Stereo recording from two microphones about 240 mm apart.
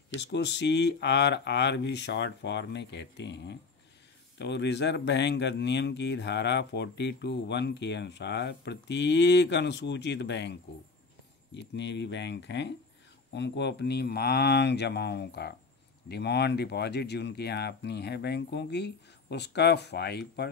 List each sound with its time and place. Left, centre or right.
0.2 s speech: left